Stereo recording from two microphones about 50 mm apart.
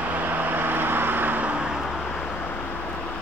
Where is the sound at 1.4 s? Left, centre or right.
Centre.